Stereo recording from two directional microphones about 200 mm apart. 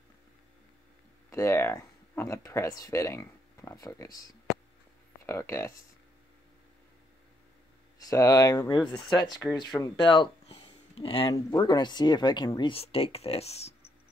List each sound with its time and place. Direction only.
1.3 s speech: 15° left (ahead or behind)
8.0 s speech: 15° left (ahead or behind)